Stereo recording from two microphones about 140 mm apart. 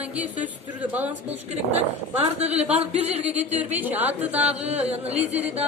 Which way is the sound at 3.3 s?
10° right (ahead or behind).